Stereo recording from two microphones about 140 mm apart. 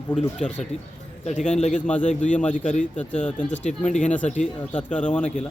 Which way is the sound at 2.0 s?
60° left (ahead or behind).